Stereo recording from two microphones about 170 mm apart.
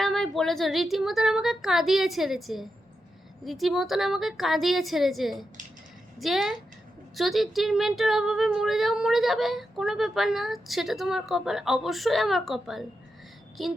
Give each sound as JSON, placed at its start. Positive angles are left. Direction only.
{"t": 0.0, "sound": "speech", "side_deg": 0}